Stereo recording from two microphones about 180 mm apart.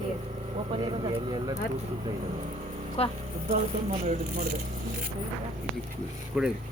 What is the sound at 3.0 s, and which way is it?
Speech, 35° left (ahead or behind).